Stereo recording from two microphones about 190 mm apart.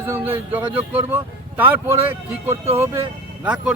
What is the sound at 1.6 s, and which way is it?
Speech, 10° right (ahead or behind).